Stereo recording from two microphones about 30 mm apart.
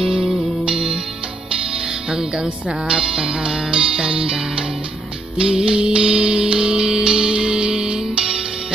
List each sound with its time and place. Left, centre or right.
0.0 s music: centre
2.0 s music: right